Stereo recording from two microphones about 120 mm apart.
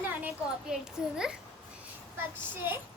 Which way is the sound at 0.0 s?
15° right (ahead or behind).